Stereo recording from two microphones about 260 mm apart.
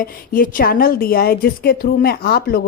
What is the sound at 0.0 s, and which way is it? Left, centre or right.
A woman's voice, left.